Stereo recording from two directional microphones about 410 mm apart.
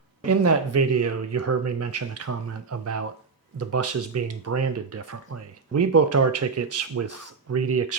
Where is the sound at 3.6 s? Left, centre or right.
Right.